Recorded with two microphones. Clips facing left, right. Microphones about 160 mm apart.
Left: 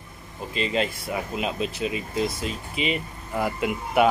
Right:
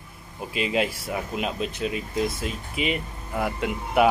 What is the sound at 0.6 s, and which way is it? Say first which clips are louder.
Speech: right 1 dB; 5° right (ahead or behind).